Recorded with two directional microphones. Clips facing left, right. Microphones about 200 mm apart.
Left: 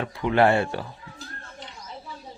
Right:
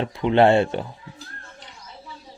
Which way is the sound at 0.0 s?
25° right (ahead or behind).